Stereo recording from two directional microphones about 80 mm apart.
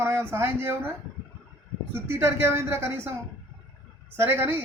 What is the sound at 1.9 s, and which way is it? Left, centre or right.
Speech, right.